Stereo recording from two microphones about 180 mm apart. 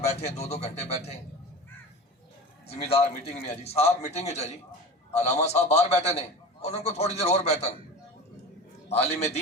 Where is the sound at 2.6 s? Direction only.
35° left (ahead or behind).